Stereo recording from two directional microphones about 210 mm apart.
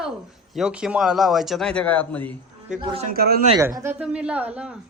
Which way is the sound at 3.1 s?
45° right (ahead or behind).